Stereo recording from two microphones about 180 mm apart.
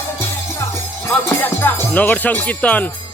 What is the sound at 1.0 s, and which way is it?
Speech, 10° left (ahead or behind).